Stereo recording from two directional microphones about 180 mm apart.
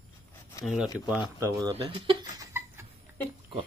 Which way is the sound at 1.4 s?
15° right (ahead or behind).